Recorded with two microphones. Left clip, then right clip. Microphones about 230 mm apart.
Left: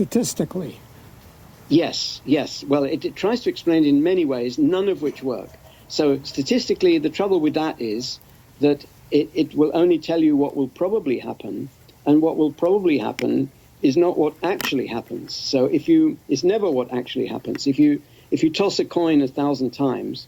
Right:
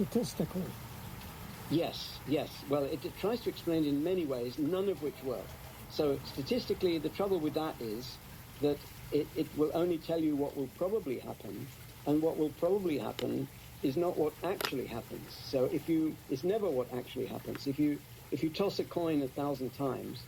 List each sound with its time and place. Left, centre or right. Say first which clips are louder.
0.1 s speech: left 12 dB; left
1.7 s speech: left 14 dB; left